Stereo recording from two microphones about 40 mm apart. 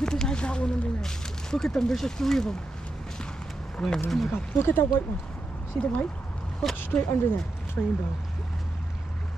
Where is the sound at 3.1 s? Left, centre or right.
Centre.